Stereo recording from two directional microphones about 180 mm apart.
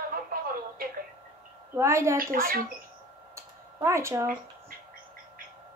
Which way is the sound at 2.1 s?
50° right (ahead or behind).